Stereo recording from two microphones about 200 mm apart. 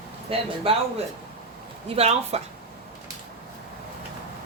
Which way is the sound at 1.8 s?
30° right (ahead or behind).